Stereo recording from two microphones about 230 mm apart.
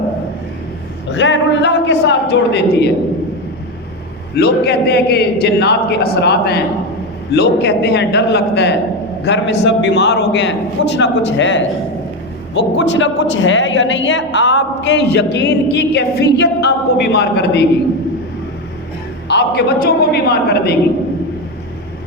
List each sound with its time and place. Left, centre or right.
1.1 s a woman's voice: left
4.4 s a woman's voice: left
19.3 s a woman's voice: left